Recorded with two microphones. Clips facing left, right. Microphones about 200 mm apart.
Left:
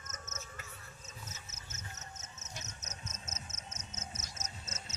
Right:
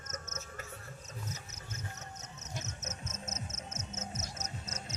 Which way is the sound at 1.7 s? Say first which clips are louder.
Right 6 dB; 20° left (ahead or behind).